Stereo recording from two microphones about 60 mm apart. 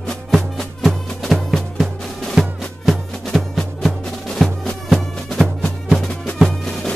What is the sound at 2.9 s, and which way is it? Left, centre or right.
Music, centre.